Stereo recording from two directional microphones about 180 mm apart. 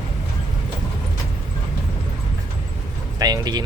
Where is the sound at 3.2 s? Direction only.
20° right (ahead or behind).